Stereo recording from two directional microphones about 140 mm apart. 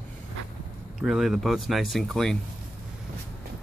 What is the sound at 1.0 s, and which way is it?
Speech, 5° right (ahead or behind).